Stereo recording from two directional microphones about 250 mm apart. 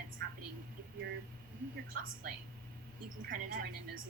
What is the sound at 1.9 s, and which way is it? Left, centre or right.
A woman's voice, right.